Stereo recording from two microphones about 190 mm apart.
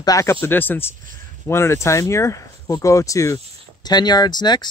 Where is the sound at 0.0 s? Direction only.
15° left (ahead or behind).